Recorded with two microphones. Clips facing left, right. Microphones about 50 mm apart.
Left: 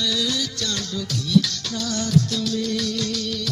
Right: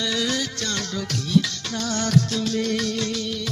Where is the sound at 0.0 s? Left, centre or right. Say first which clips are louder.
Even; right.